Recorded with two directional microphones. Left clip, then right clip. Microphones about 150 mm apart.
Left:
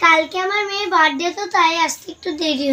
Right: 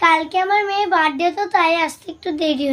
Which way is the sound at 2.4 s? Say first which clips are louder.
Even; 40° right (ahead or behind).